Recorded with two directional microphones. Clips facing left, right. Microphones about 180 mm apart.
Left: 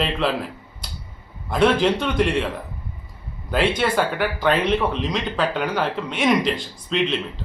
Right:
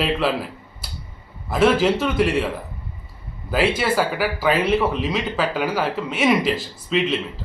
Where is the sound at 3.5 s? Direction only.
5° right (ahead or behind).